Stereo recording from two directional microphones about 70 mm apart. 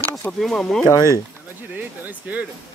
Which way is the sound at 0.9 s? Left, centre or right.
Left.